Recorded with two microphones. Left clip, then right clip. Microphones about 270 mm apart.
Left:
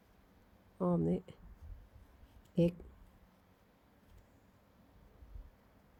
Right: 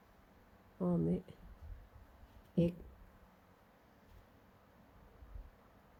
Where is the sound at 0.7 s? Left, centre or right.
Left.